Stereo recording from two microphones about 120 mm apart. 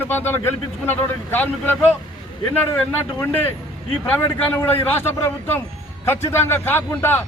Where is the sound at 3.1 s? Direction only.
20° left (ahead or behind).